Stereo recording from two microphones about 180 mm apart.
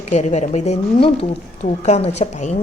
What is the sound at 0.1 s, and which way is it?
A woman's voice, 40° left (ahead or behind).